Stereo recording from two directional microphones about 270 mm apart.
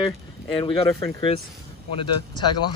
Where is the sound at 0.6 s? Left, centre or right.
Centre.